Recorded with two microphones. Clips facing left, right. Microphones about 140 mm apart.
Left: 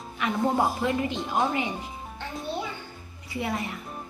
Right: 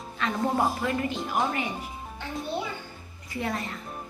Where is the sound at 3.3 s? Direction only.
15° left (ahead or behind).